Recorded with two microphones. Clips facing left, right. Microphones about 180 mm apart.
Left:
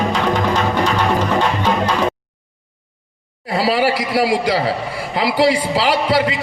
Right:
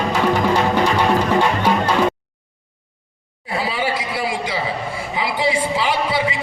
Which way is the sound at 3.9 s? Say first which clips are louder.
Left 6 dB; 85° left.